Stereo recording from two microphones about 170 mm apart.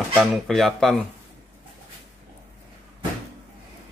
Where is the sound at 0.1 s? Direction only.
Centre (ahead or behind).